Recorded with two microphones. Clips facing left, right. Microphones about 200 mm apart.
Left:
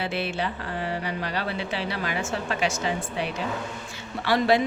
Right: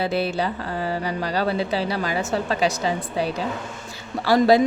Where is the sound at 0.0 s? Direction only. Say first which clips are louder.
Right 5 dB; 40° right (ahead or behind).